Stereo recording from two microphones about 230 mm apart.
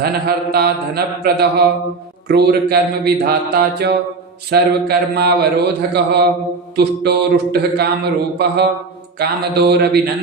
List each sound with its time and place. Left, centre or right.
0.0 s speech: right